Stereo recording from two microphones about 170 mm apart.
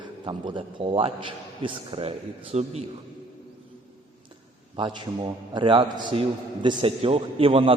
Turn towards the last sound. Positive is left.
turn(degrees=-30)  # may be behind; listen again after turning